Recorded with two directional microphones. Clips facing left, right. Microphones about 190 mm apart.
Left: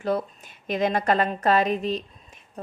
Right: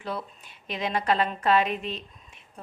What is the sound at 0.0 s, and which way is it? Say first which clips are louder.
A woman's voice: left 8 dB; 45° left (ahead or behind).